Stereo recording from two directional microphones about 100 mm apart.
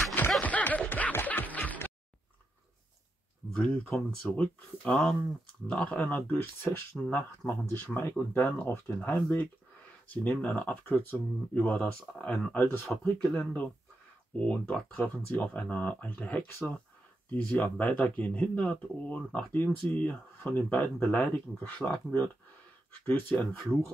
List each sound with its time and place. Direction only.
0.4 s music: 15° left (ahead or behind)
3.7 s speech: 10° left (ahead or behind)
12.5 s speech: 20° left (ahead or behind)
13.2 s speech: 10° left (ahead or behind)